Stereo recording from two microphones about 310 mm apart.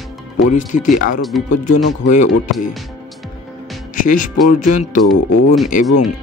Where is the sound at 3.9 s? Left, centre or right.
Left.